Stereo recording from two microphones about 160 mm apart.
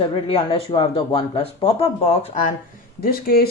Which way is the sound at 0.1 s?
35° left (ahead or behind).